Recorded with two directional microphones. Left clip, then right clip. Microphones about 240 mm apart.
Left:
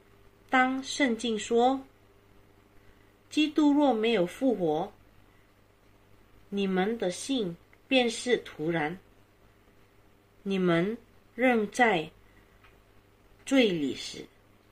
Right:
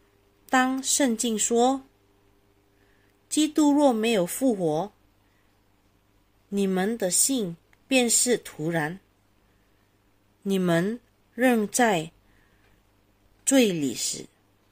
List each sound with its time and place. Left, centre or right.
0.5 s speech: right
3.3 s speech: right
6.5 s speech: right
10.4 s speech: right
13.5 s speech: right